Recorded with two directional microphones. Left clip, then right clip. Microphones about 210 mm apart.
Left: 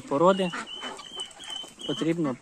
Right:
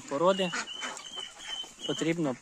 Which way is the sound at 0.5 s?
55° right (ahead or behind).